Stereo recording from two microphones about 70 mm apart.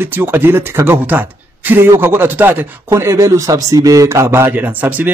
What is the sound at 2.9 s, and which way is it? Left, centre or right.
A man's voice, right.